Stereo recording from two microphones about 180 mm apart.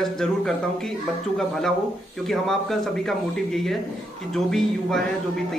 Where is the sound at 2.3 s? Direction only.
Centre (ahead or behind).